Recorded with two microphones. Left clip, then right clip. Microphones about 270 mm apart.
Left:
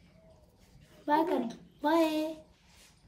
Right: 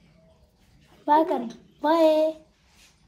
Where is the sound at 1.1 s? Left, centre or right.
Centre.